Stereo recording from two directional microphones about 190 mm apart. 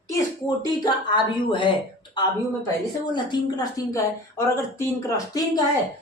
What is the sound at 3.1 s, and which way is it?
A woman's voice, 20° left (ahead or behind).